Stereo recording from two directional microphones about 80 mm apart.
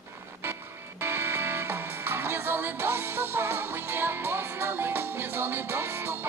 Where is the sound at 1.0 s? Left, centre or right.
Right.